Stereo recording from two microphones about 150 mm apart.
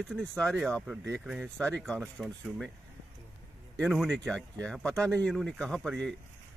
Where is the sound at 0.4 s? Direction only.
5° left (ahead or behind).